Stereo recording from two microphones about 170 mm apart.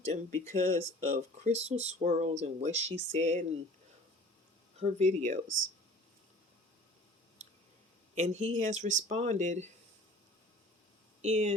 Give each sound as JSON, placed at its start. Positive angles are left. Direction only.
{"t": 0.0, "sound": "speech", "side_deg": -45}
{"t": 1.5, "sound": "speech", "side_deg": -40}
{"t": 4.8, "sound": "speech", "side_deg": -40}
{"t": 8.1, "sound": "speech", "side_deg": -45}
{"t": 11.2, "sound": "speech", "side_deg": -40}